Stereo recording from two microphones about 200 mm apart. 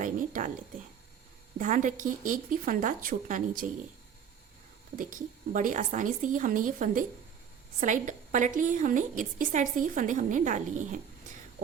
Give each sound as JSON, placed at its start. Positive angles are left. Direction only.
{"t": 0.0, "sound": "a sound", "side_deg": -40}
{"t": 1.5, "sound": "a woman's voice", "side_deg": -40}
{"t": 4.9, "sound": "a woman's voice", "side_deg": -40}